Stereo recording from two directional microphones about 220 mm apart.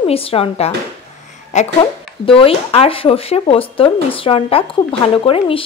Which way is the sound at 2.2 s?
25° left (ahead or behind).